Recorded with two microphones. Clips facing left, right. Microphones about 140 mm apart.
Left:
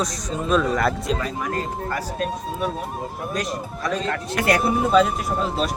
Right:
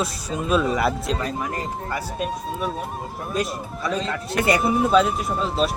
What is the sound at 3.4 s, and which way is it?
Speech, 5° right (ahead or behind).